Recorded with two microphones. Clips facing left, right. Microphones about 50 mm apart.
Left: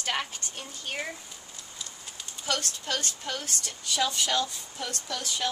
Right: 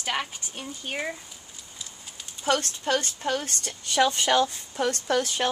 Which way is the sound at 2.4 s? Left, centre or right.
Right.